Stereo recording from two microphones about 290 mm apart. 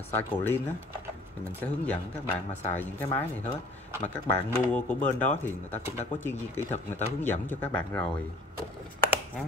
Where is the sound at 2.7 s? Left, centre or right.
Centre.